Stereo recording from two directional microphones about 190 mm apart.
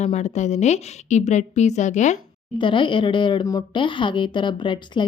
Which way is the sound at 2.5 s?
25° left (ahead or behind).